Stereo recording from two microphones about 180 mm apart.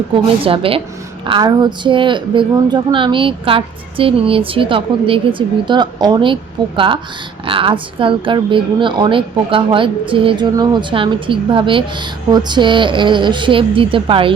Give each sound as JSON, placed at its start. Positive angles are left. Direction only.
{"t": 0.1, "sound": "a woman's voice", "side_deg": -30}